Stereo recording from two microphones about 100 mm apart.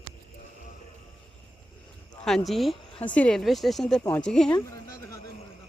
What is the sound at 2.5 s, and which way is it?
Speech, centre (ahead or behind).